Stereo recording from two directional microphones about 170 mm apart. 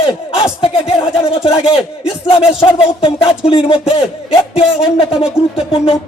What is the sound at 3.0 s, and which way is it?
A man's voice, 30° left (ahead or behind).